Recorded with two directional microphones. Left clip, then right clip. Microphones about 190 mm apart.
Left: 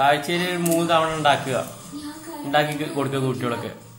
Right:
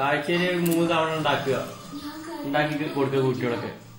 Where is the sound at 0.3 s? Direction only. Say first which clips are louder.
Left 1 dB; 35° left (ahead or behind).